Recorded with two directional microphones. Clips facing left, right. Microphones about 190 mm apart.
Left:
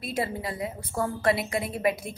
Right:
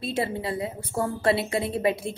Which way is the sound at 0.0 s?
25° right (ahead or behind).